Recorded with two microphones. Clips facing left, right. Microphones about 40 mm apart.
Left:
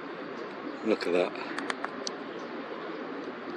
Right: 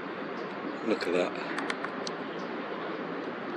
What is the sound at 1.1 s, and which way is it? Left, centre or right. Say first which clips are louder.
Speech: left 1 dB; centre.